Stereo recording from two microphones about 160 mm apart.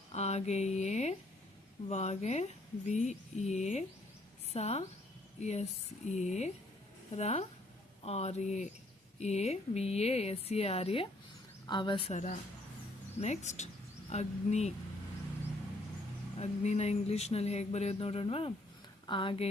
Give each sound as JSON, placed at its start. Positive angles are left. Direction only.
{"t": 0.1, "sound": "a sound", "side_deg": 40}
{"t": 1.9, "sound": "speech", "side_deg": 45}
{"t": 13.1, "sound": "speech", "side_deg": 45}
{"t": 16.4, "sound": "speech", "side_deg": 40}